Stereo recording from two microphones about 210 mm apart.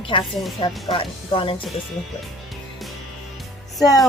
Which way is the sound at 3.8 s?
15° left (ahead or behind).